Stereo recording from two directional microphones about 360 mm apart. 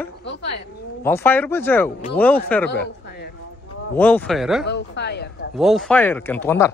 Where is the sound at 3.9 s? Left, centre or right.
Centre.